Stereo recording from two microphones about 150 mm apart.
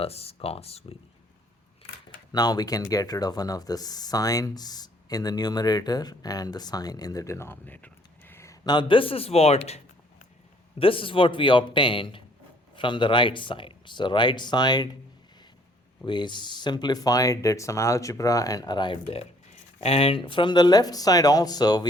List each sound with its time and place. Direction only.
0.0 s speech: 40° left (ahead or behind)
2.3 s speech: 25° left (ahead or behind)
16.0 s speech: 30° left (ahead or behind)